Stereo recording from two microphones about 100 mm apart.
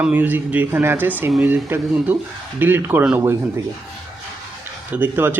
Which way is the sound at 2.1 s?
15° right (ahead or behind).